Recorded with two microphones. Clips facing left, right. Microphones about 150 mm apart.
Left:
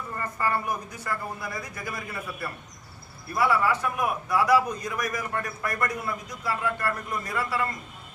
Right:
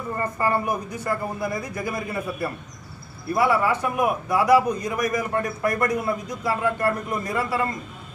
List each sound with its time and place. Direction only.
0.4 s a man's voice: 20° right (ahead or behind)